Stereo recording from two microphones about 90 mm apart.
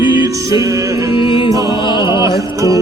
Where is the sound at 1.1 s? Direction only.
70° left (ahead or behind).